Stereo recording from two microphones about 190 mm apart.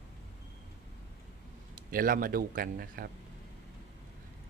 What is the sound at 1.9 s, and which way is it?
Speech, 50° right (ahead or behind).